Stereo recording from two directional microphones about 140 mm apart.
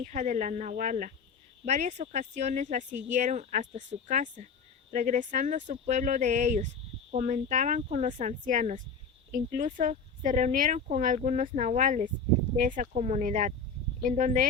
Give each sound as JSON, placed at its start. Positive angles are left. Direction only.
{"t": 0.0, "sound": "speech", "side_deg": -60}